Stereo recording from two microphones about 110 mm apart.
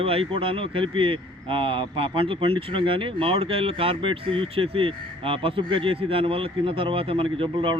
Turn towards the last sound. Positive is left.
turn(degrees=-55)  # may be behind; listen again after turning